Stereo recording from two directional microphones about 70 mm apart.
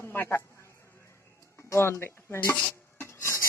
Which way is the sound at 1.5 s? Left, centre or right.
Left.